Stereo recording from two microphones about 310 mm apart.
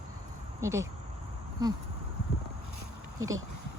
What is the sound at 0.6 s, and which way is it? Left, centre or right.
Speech, centre.